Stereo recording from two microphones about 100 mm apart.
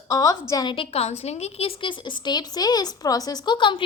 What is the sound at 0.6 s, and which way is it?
A woman's voice, 60° left (ahead or behind).